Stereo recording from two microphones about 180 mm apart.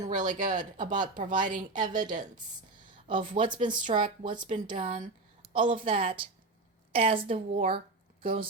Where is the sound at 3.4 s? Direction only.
50° right (ahead or behind).